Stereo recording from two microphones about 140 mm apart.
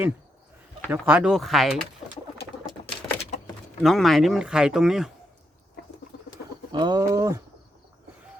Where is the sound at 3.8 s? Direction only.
Centre (ahead or behind).